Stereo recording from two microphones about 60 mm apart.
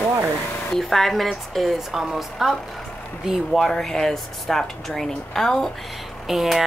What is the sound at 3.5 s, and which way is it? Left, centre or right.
Speech, centre.